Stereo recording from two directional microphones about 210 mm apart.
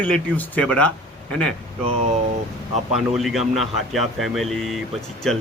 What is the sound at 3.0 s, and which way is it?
Speech, centre (ahead or behind).